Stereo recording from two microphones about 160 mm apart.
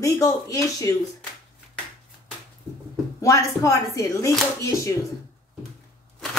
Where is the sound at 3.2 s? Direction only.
20° left (ahead or behind).